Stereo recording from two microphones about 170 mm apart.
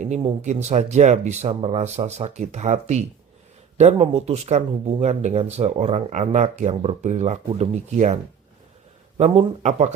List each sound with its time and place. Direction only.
0.4 s speech: 40° right (ahead or behind)